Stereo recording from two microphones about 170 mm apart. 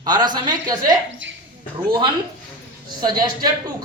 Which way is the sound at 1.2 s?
90° right.